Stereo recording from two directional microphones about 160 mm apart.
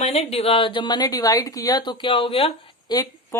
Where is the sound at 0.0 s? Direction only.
40° left (ahead or behind).